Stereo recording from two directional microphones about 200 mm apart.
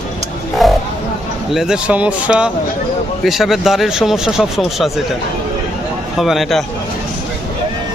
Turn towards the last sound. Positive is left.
turn(degrees=0)  # may be behind; listen again after turning